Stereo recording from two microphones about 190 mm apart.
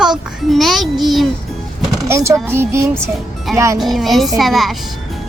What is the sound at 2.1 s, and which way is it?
Speech, 15° right (ahead or behind).